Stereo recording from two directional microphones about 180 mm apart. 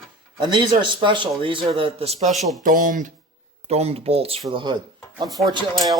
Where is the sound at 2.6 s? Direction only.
50° right (ahead or behind).